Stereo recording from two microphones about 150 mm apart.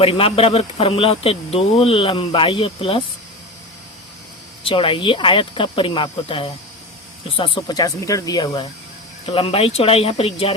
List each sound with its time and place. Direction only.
0.0 s speech: 40° left (ahead or behind)
4.6 s speech: 35° left (ahead or behind)
9.3 s speech: 45° left (ahead or behind)